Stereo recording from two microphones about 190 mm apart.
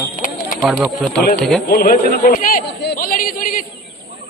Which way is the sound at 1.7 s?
50° left (ahead or behind).